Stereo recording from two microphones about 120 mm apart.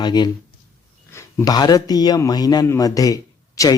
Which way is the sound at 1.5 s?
35° left (ahead or behind).